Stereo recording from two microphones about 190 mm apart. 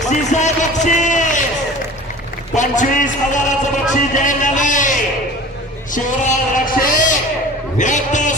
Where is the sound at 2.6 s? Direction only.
40° left (ahead or behind).